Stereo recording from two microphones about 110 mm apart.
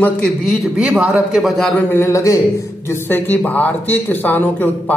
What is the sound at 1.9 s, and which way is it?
Speech, 25° left (ahead or behind).